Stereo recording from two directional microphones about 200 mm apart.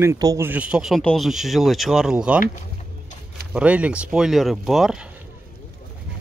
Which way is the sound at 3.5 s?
5° right (ahead or behind).